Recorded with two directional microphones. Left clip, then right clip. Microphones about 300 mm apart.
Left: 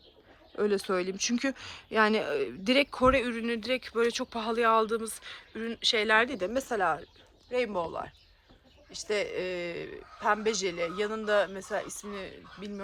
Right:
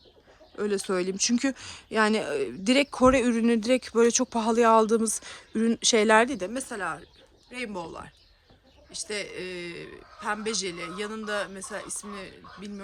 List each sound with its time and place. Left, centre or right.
0.5 s a man's voice: centre